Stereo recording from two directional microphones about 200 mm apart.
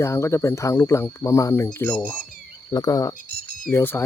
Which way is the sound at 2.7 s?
20° left (ahead or behind).